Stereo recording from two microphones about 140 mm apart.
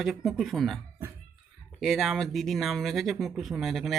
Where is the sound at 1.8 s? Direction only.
Centre (ahead or behind).